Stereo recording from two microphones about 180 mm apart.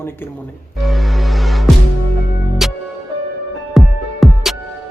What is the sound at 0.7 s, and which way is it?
Music, centre (ahead or behind).